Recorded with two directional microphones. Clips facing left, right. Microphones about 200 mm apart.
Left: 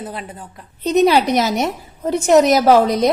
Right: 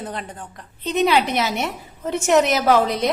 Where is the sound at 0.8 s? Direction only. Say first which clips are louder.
Left 5 dB; 40° left (ahead or behind).